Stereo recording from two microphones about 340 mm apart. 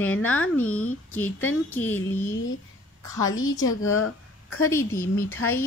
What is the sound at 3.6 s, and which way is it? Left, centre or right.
Speech, left.